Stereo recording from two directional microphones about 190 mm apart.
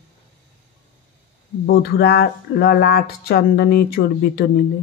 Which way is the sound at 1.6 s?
55° left (ahead or behind).